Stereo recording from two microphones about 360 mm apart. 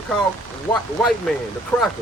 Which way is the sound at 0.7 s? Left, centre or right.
Centre.